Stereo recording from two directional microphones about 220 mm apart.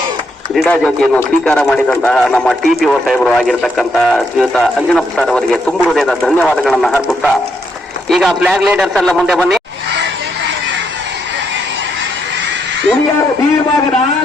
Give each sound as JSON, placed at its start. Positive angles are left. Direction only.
{"t": 0.5, "sound": "speech", "side_deg": 5}